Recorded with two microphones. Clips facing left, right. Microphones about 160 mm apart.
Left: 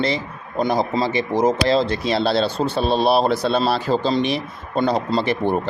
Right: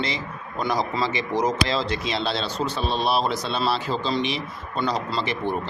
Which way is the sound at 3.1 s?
55° left (ahead or behind).